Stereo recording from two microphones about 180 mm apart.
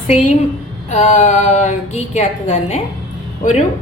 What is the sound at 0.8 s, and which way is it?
A woman's voice, 40° left (ahead or behind).